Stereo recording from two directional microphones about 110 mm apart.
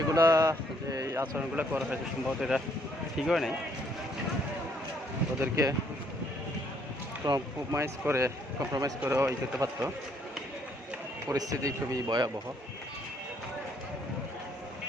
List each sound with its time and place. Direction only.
0.1 s speech: 30° right (ahead or behind)
1.2 s speech: 15° right (ahead or behind)
2.2 s speech: 5° right (ahead or behind)
5.4 s a man's voice: 30° right (ahead or behind)
7.3 s a man's voice: 30° right (ahead or behind)
11.3 s speech: 30° right (ahead or behind)